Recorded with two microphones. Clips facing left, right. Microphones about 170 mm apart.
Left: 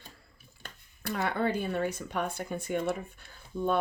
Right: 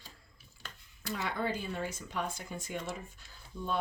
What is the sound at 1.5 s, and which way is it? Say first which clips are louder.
Speech: left 7 dB; 60° left (ahead or behind).